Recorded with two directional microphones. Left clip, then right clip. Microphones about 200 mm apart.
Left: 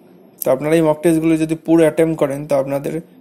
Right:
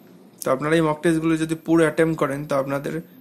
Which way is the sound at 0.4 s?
5° left (ahead or behind).